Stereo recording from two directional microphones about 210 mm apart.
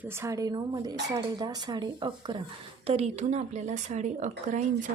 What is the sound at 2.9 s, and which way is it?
A woman's voice, 30° right (ahead or behind).